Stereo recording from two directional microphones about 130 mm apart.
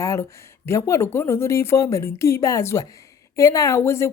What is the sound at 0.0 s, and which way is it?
A woman's voice, 25° left (ahead or behind).